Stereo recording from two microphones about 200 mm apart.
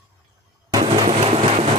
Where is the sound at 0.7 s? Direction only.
30° right (ahead or behind).